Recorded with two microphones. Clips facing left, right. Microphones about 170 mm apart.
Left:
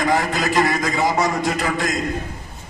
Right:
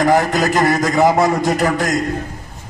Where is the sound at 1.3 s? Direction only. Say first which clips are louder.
Right 5 dB; 45° right (ahead or behind).